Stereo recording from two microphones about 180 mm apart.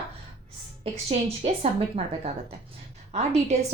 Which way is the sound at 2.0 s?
30° right (ahead or behind).